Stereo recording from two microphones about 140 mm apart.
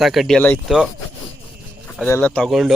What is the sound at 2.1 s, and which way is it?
Speech, 15° left (ahead or behind).